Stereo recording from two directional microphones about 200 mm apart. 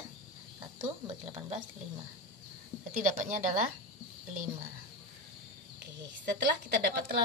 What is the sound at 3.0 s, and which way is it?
Speech, 40° right (ahead or behind).